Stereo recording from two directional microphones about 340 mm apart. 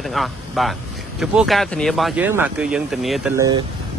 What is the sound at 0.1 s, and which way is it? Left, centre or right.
Speech, centre.